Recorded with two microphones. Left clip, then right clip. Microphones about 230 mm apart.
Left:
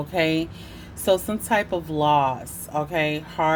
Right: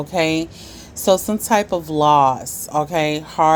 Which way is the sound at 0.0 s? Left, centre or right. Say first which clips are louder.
Right 4 dB; right.